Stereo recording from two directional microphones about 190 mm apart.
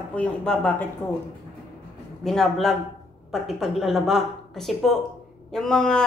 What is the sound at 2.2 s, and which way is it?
Speech, centre (ahead or behind).